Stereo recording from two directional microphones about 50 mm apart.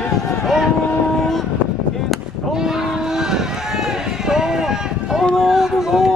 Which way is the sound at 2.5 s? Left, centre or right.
Centre.